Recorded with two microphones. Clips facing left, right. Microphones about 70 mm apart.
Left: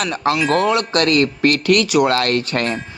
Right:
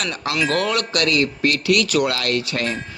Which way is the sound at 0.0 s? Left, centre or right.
Left.